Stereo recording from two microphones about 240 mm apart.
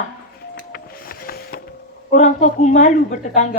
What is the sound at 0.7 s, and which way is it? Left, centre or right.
Vehicle, left.